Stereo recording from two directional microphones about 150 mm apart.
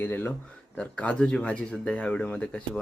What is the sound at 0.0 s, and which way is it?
Speech, 15° left (ahead or behind).